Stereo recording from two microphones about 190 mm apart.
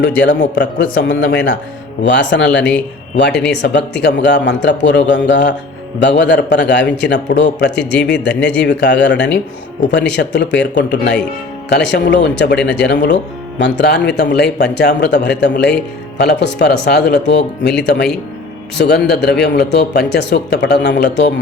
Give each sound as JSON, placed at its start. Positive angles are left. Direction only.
{"t": 0.2, "sound": "a man's voice", "side_deg": 65}
{"t": 8.3, "sound": "speech", "side_deg": 5}
{"t": 8.6, "sound": "a man's voice", "side_deg": 65}